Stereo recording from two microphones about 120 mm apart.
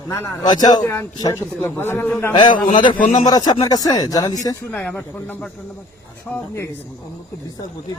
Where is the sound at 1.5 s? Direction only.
20° left (ahead or behind).